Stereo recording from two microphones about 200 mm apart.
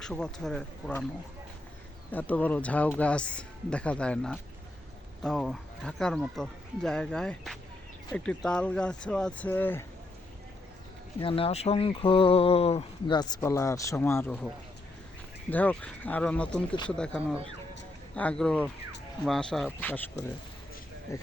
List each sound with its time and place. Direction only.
0.0 s speech: 5° left (ahead or behind)
2.1 s speech: 10° left (ahead or behind)
11.2 s speech: 25° left (ahead or behind); by 14.3 s 10° left (ahead or behind)
15.4 s speech: 10° left (ahead or behind)
17.2 s speech: 5° right (ahead or behind)
18.1 s speech: 5° left (ahead or behind)
21.1 s speech: 15° left (ahead or behind)